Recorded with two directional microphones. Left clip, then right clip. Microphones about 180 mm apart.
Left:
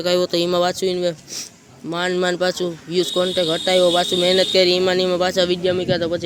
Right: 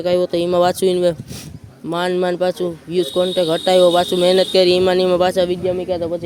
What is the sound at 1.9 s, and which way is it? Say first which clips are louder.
Speech: right 2 dB; 20° right (ahead or behind).